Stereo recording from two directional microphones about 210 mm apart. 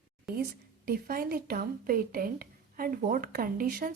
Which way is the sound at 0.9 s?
45° right (ahead or behind).